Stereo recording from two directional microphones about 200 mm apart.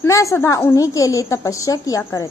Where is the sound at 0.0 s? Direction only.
15° left (ahead or behind).